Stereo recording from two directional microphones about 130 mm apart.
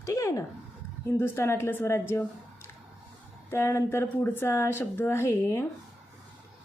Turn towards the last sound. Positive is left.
turn(degrees=20)  # may be behind; listen again after turning